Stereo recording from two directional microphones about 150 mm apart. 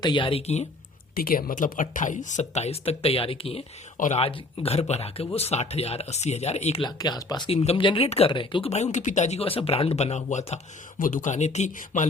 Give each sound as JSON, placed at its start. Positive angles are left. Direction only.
{"t": 0.0, "sound": "speech", "side_deg": 30}
{"t": 1.1, "sound": "speech", "side_deg": 75}
{"t": 3.9, "sound": "speech", "side_deg": 60}
{"t": 4.2, "sound": "speech", "side_deg": 40}
{"t": 6.8, "sound": "speech", "side_deg": 25}
{"t": 7.5, "sound": "speech", "side_deg": 40}
{"t": 8.7, "sound": "speech", "side_deg": 50}